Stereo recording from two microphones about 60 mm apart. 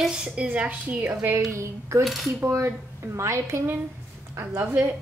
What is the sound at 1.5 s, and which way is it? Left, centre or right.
Speech, right.